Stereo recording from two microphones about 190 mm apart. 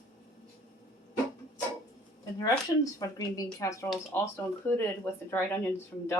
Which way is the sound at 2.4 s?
20° left (ahead or behind).